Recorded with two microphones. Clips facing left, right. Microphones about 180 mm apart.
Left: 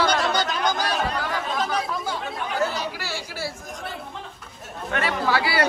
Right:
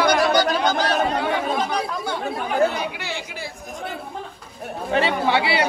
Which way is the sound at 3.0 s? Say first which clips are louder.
Even; 15° right (ahead or behind).